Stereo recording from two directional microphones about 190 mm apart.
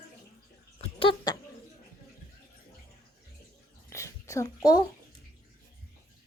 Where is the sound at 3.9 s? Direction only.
15° left (ahead or behind).